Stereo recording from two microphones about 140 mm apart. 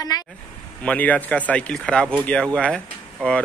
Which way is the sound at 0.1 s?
30° left (ahead or behind).